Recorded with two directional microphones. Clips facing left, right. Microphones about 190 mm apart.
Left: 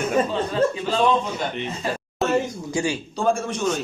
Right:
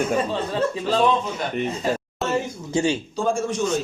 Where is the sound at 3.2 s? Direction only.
60° left (ahead or behind).